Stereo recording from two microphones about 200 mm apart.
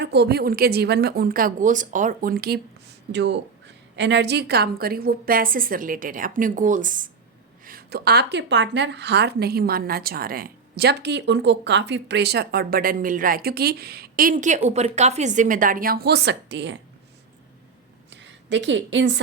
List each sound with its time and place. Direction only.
0.0 s a woman's voice: 55° right (ahead or behind)
3.1 s a woman's voice: 60° right (ahead or behind)
18.1 s a woman's voice: 60° right (ahead or behind)